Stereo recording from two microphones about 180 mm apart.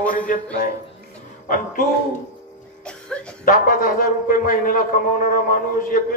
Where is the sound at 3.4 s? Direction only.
50° left (ahead or behind).